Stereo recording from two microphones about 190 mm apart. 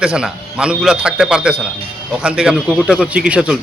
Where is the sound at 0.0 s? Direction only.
5° right (ahead or behind).